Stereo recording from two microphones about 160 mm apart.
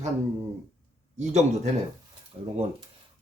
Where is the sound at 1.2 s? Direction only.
45° right (ahead or behind).